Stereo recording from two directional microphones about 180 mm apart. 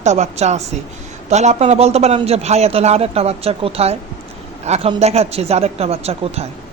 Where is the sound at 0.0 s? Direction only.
40° right (ahead or behind).